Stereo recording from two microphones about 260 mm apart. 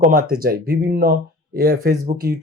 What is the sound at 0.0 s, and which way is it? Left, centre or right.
Speech, right.